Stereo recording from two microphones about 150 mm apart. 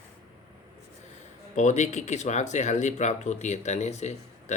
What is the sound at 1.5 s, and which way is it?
Speech, 55° left (ahead or behind).